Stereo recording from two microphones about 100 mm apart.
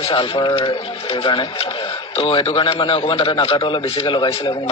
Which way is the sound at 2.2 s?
65° left (ahead or behind).